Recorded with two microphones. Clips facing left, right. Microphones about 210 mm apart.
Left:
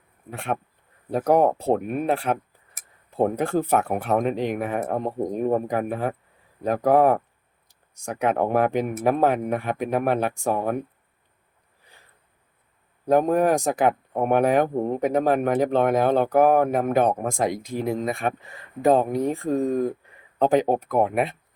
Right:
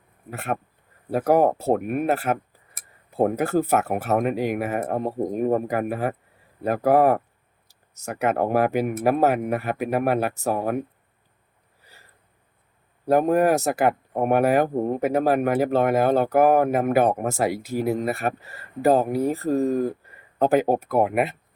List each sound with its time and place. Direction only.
0.3 s speech: 5° right (ahead or behind)
13.1 s speech: 10° right (ahead or behind)